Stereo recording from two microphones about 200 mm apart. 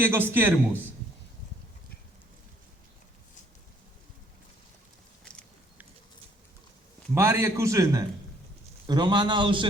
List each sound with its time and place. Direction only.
0.0 s a man's voice: 10° right (ahead or behind)
5.2 s biting: 5° left (ahead or behind)
7.1 s a man's voice: 15° right (ahead or behind)